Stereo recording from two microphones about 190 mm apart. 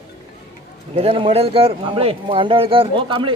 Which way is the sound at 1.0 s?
30° right (ahead or behind).